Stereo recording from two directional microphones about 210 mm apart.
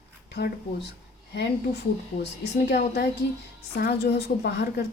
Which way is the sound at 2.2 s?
55° left (ahead or behind).